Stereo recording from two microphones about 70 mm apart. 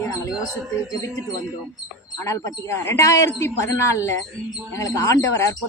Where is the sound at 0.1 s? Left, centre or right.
Left.